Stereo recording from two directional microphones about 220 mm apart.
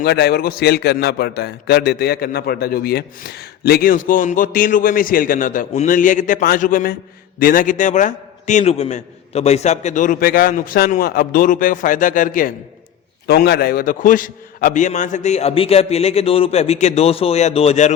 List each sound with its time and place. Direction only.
0.0 s a man's voice: 45° left (ahead or behind); by 17.9 s 30° left (ahead or behind)